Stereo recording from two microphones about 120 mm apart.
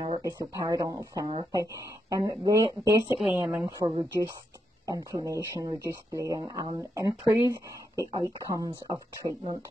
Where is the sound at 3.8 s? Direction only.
30° right (ahead or behind).